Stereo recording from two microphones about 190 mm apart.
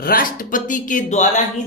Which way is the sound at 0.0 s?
50° left (ahead or behind).